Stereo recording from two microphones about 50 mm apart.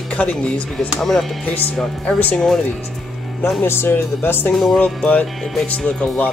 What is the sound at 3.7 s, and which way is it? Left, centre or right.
Speech, left.